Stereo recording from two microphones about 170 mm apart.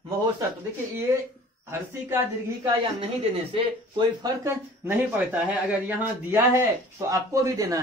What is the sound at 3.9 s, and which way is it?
Speech, 25° right (ahead or behind).